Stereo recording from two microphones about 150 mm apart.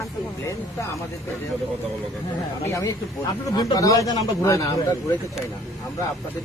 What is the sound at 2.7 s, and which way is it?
Speech, 20° left (ahead or behind).